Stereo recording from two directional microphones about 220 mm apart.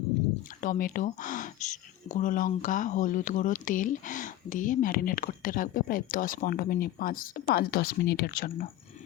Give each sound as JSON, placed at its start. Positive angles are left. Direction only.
{"t": 0.6, "sound": "speech", "side_deg": 35}